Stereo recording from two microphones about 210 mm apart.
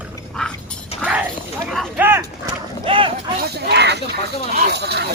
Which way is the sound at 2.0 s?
10° right (ahead or behind).